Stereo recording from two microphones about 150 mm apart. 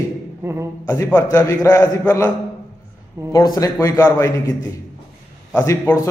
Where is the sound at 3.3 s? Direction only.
25° left (ahead or behind).